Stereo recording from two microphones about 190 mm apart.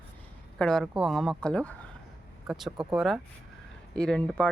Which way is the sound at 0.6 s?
Centre (ahead or behind).